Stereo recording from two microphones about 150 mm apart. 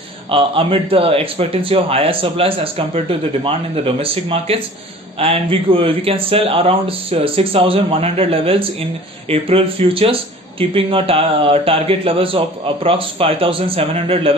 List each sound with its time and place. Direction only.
0.3 s a man's voice: 35° right (ahead or behind)